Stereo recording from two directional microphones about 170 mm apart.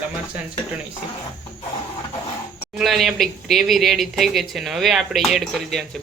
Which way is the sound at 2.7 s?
Centre (ahead or behind).